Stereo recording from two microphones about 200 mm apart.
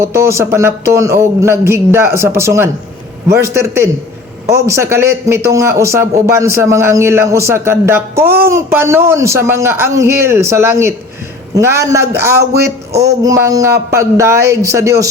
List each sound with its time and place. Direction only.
0.0 s a man's voice: 15° right (ahead or behind)